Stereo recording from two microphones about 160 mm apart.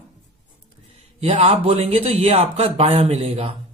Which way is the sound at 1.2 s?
40° right (ahead or behind).